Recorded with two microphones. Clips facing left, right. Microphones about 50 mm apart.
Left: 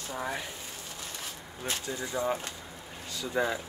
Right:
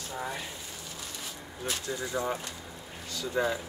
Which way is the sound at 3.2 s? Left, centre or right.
Left.